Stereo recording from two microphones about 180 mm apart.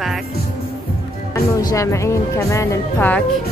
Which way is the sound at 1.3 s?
20° left (ahead or behind).